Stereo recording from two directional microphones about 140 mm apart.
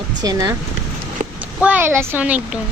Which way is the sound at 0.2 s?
25° right (ahead or behind).